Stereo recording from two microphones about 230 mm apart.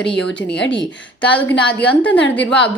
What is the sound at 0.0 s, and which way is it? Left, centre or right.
A woman's voice, centre.